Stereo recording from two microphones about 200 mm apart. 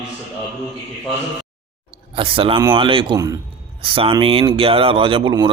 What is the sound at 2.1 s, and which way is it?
Speech, 25° right (ahead or behind).